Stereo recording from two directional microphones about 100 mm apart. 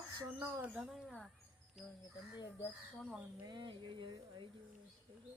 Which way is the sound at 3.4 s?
50° right (ahead or behind).